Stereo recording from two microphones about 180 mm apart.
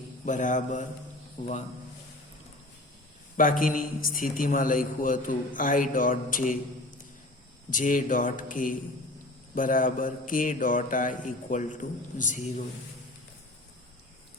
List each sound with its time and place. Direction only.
0.3 s a man's voice: 45° left (ahead or behind)
3.3 s a man's voice: 50° left (ahead or behind)
7.7 s a man's voice: 45° left (ahead or behind)